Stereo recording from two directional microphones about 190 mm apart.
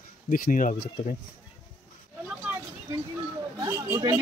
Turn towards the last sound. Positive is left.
turn(degrees=-15)  # may be behind; listen again after turning